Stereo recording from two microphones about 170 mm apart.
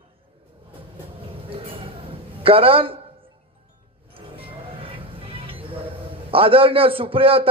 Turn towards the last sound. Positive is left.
turn(degrees=-30)  # may be behind; listen again after turning